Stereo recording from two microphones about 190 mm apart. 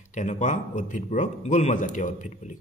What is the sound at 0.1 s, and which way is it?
A man's voice, 40° left (ahead or behind).